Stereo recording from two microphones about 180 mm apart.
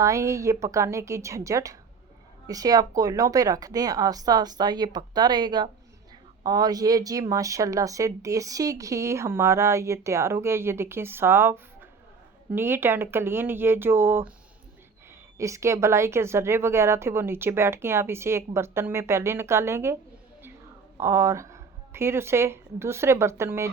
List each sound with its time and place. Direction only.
0.0 s speech: 15° right (ahead or behind)
15.4 s speech: 15° right (ahead or behind)
21.0 s speech: 15° right (ahead or behind)